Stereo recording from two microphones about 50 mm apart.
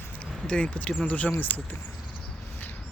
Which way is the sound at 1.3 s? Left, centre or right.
Left.